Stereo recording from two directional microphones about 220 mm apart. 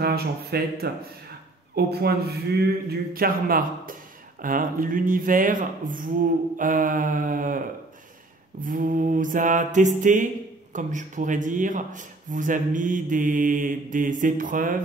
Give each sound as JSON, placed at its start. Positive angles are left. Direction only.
{"t": 0.0, "sound": "a man's voice", "side_deg": -45}